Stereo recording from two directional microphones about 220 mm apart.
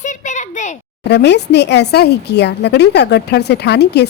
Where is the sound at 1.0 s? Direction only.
50° left (ahead or behind).